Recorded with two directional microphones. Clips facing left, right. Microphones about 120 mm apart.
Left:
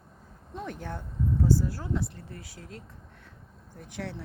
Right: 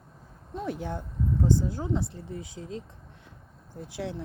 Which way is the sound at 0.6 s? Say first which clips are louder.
Right 4 dB; 10° right (ahead or behind).